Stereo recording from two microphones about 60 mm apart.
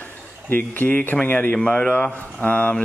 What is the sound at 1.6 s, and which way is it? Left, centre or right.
A man's voice, centre.